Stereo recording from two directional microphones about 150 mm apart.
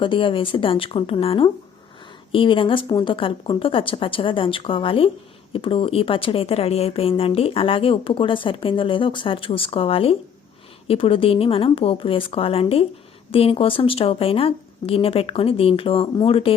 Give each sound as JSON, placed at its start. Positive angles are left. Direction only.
{"t": 0.0, "sound": "speech", "side_deg": 35}